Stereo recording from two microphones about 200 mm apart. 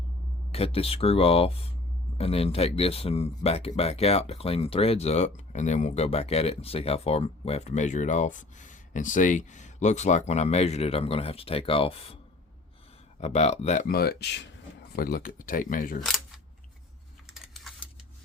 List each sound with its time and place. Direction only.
0.5 s speech: 30° left (ahead or behind)
13.1 s speech: 35° left (ahead or behind)
16.0 s camera: centre (ahead or behind)
17.4 s typing: centre (ahead or behind)